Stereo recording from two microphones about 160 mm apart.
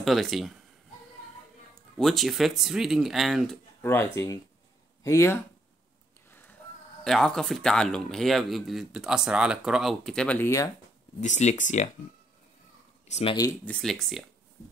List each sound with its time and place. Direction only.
0.0 s speech: centre (ahead or behind)
2.0 s speech: centre (ahead or behind)
3.8 s speech: 15° left (ahead or behind)
7.1 s speech: 5° left (ahead or behind)
11.1 s speech: 50° left (ahead or behind)
13.0 s speech: 40° left (ahead or behind)
13.7 s speech: 5° left (ahead or behind)